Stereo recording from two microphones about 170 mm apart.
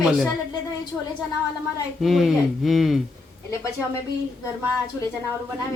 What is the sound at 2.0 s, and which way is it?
Speech, centre (ahead or behind).